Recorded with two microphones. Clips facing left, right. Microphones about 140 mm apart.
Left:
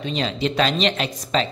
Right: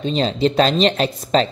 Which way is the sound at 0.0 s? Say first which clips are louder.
Right 6 dB; 35° right (ahead or behind).